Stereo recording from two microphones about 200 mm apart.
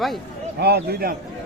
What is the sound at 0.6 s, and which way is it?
Speech, 55° right (ahead or behind).